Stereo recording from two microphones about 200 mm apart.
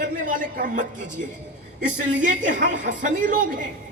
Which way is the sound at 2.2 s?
40° right (ahead or behind).